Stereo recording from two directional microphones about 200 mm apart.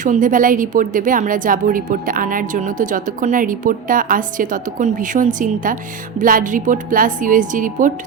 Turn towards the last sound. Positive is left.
turn(degrees=-40)  # may be behind; listen again after turning